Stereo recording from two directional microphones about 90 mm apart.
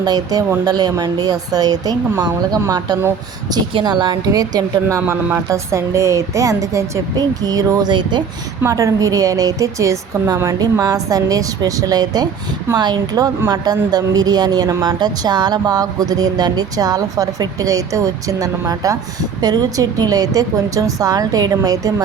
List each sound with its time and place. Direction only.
0.0 s a woman's voice: 45° right (ahead or behind)
3.8 s a woman's voice: 60° right (ahead or behind)
4.3 s a woman's voice: 45° right (ahead or behind)
4.9 s a woman's voice: 30° right (ahead or behind); by 8.2 s 55° right (ahead or behind)
8.6 s a woman's voice: 40° right (ahead or behind)